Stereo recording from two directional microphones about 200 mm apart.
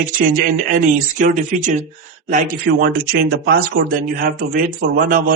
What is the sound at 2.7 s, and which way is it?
Speech, 50° right (ahead or behind).